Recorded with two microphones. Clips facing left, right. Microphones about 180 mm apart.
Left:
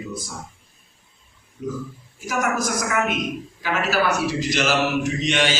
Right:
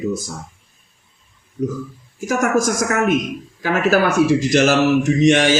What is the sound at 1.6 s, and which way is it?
Speech, 45° right (ahead or behind).